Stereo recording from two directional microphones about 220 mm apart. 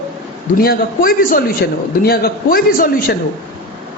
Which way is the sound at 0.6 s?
40° left (ahead or behind).